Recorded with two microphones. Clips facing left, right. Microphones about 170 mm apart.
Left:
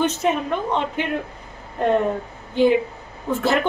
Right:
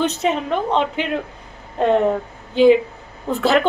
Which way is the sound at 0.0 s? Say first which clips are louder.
Right 1 dB; 70° right (ahead or behind).